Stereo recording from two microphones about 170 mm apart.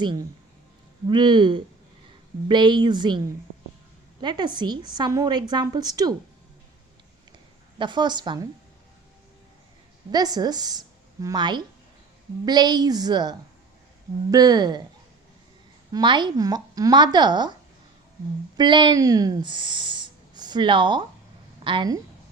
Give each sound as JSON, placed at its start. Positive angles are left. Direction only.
{"t": 0.0, "sound": "a woman's voice", "side_deg": -25}
{"t": 7.8, "sound": "a woman's voice", "side_deg": -25}
{"t": 10.1, "sound": "a woman's voice", "side_deg": -25}
{"t": 15.9, "sound": "a woman's voice", "side_deg": -25}
{"t": 18.5, "sound": "a woman's voice", "side_deg": -25}